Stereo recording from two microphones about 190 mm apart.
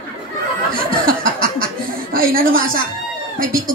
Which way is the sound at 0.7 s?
50° right (ahead or behind).